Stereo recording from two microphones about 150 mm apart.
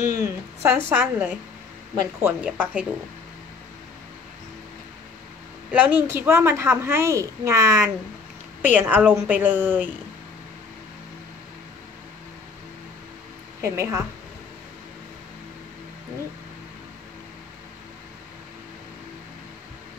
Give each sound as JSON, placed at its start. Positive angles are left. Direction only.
{"t": 0.0, "sound": "a woman's voice", "side_deg": -20}
{"t": 5.7, "sound": "a woman's voice", "side_deg": -10}
{"t": 13.6, "sound": "a woman's voice", "side_deg": -20}